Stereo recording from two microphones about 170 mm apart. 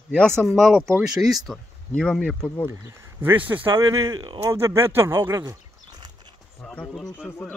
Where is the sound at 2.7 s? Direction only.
15° right (ahead or behind).